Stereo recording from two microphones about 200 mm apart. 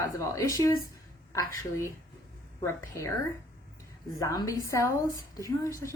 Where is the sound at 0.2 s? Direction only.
15° left (ahead or behind).